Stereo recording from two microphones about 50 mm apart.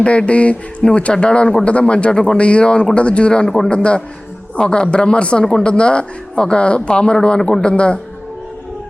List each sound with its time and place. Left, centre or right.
0.0 s speech: left
4.5 s speech: centre
5.5 s speech: centre
5.7 s speech: left